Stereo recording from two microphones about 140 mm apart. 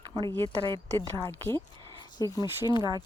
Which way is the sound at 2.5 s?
25° right (ahead or behind).